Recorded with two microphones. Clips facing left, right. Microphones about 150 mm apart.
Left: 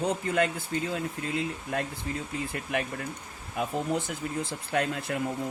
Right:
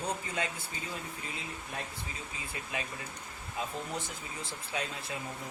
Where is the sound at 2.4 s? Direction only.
65° left (ahead or behind).